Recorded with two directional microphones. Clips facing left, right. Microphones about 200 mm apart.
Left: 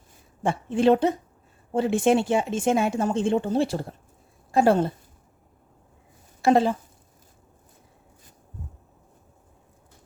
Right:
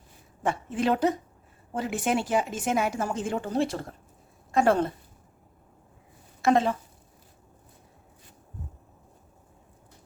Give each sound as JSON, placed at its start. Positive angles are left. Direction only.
{"t": 0.4, "sound": "speech", "side_deg": 30}
{"t": 6.4, "sound": "speech", "side_deg": 30}